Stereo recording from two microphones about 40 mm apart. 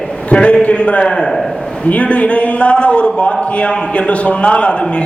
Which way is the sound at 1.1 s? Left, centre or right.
Centre.